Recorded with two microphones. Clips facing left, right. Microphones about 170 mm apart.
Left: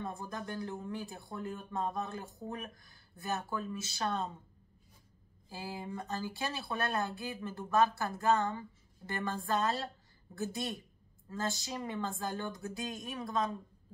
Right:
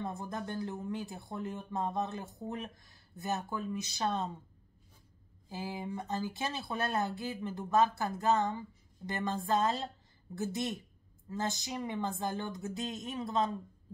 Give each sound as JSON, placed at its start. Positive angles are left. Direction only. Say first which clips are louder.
{"t": 0.0, "sound": "speech", "louder": "right 2 dB", "side_deg": -20}
{"t": 5.5, "sound": "speech", "louder": "right 3 dB", "side_deg": -20}